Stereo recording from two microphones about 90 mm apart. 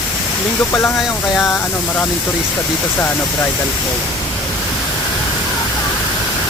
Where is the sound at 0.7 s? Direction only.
30° left (ahead or behind).